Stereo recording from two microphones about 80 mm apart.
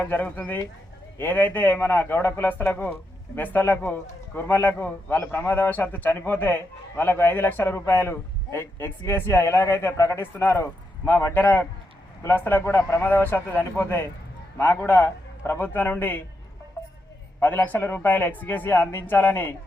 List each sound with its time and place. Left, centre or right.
0.0 s a man's voice: left
11.3 s a man's voice: left
17.7 s a man's voice: left